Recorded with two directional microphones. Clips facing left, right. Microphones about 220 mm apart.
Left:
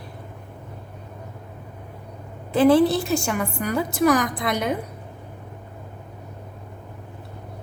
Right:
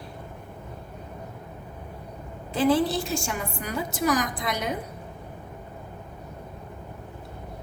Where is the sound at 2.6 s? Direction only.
60° left (ahead or behind).